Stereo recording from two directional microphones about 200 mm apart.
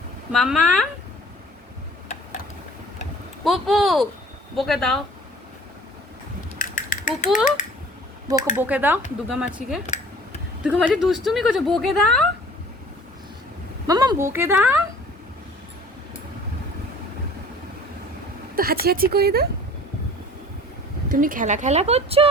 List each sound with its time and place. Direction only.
0.3 s speech: centre (ahead or behind)
3.4 s speech: centre (ahead or behind)
6.6 s mechanisms: 40° left (ahead or behind)
8.5 s speech: 10° right (ahead or behind)
13.8 s speech: 20° right (ahead or behind)
18.5 s speech: 50° right (ahead or behind)
21.1 s speech: 45° right (ahead or behind)